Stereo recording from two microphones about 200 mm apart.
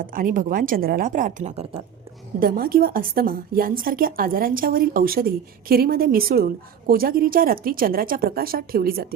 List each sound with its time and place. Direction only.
0.0 s a woman's voice: 45° right (ahead or behind)
2.4 s a woman's voice: 45° right (ahead or behind)